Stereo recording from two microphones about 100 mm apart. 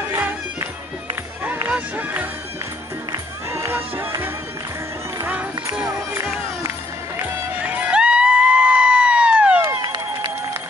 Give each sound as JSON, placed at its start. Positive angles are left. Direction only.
{"t": 0.1, "sound": "music", "side_deg": -20}
{"t": 1.7, "sound": "music", "side_deg": -20}
{"t": 7.5, "sound": "crowd", "side_deg": -15}